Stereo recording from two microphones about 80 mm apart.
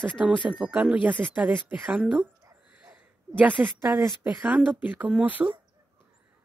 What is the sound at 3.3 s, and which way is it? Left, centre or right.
Speech, centre.